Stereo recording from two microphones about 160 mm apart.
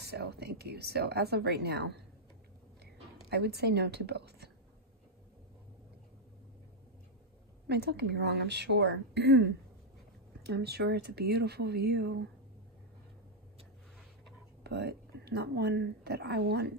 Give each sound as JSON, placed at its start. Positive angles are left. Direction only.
{"t": 0.0, "sound": "speech", "side_deg": -90}
{"t": 3.3, "sound": "speech", "side_deg": -90}
{"t": 7.6, "sound": "speech", "side_deg": -90}
{"t": 14.6, "sound": "a woman's voice", "side_deg": -90}